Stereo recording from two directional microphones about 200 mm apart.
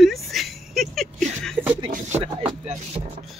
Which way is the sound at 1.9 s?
30° right (ahead or behind).